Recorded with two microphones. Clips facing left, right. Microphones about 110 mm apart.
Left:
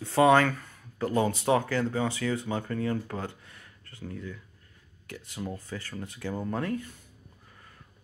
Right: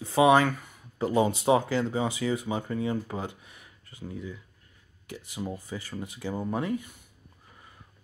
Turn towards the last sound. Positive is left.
turn(degrees=-10)  # may be behind; listen again after turning